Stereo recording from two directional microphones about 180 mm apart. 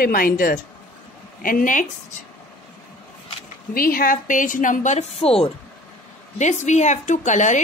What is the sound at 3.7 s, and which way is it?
Speech, 55° left (ahead or behind).